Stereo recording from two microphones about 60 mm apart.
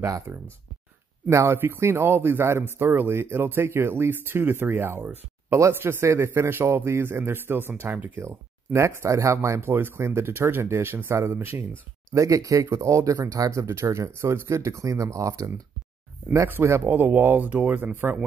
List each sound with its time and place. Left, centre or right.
0.3 s speech: right
1.6 s speech: right
8.7 s speech: right
9.6 s speech: right
12.1 s speech: right
12.7 s speech: right
13.7 s speech: right
16.4 s speech: right